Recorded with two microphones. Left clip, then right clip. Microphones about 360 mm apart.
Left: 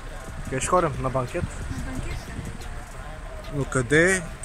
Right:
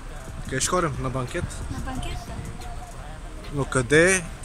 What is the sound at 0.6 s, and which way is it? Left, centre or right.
Speech, centre.